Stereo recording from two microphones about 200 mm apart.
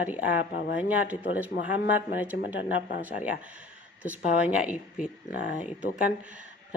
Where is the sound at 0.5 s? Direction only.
50° left (ahead or behind).